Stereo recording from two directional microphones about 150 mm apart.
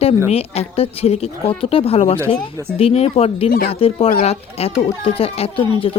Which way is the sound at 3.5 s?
80° left.